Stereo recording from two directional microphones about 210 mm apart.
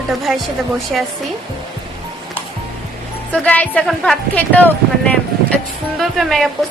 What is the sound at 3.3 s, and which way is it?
A woman's voice, 5° left (ahead or behind).